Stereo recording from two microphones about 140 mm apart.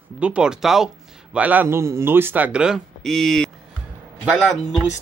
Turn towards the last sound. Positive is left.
turn(degrees=0)  # may be behind; listen again after turning